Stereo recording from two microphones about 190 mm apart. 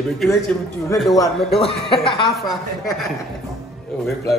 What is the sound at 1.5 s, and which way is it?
Speech, 30° left (ahead or behind).